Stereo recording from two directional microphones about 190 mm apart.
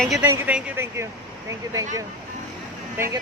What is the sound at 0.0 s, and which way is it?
A man's voice, centre (ahead or behind).